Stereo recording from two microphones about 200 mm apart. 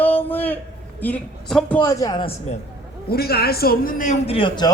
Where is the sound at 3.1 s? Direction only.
50° left (ahead or behind); by 4.7 s 25° left (ahead or behind).